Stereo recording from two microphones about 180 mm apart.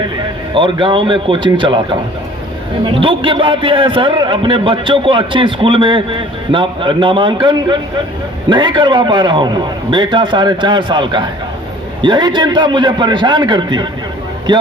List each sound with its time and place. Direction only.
0.5 s a man's voice: 25° right (ahead or behind)
3.0 s a man's voice: 30° right (ahead or behind)